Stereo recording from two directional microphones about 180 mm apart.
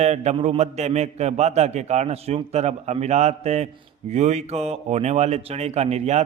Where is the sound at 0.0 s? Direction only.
35° right (ahead or behind).